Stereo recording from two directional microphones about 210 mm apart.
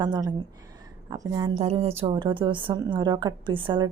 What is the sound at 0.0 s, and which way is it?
A woman's voice, 20° right (ahead or behind).